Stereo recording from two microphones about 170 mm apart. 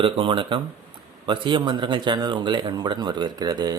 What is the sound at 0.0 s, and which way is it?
Speech, 30° right (ahead or behind).